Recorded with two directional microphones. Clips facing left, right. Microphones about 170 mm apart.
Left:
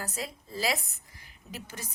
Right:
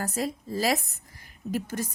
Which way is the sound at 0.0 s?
45° right (ahead or behind).